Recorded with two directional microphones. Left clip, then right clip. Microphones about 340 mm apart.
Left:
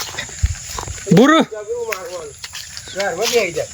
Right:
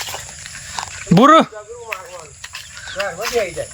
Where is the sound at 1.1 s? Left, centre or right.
Centre.